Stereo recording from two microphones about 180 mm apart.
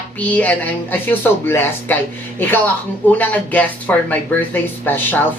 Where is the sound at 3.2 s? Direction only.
10° left (ahead or behind).